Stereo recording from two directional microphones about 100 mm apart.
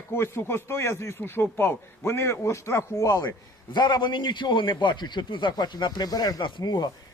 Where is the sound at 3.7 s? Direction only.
50° left (ahead or behind).